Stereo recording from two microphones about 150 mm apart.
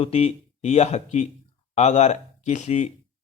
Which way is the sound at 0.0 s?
45° left (ahead or behind).